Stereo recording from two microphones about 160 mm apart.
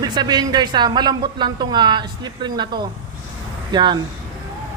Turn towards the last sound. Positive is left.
turn(degrees=-30)  # may be behind; listen again after turning